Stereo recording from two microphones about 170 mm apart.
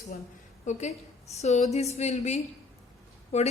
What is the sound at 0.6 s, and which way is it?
A woman's voice, 45° left (ahead or behind).